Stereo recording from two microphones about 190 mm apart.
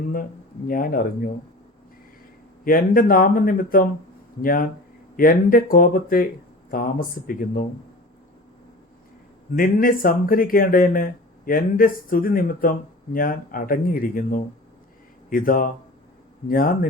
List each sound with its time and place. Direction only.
0.7 s speech: 50° left (ahead or behind)
2.6 s speech: 50° left (ahead or behind)
9.6 s speech: 50° left (ahead or behind)